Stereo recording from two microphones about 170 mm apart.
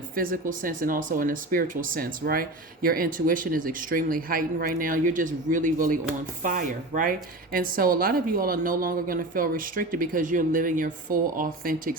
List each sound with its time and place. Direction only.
0.2 s speech: 55° right (ahead or behind)